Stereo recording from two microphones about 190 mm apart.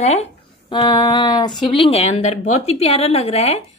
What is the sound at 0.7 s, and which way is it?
Speech, 20° left (ahead or behind).